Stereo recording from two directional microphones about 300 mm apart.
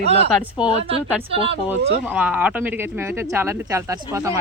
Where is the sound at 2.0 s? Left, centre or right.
Centre.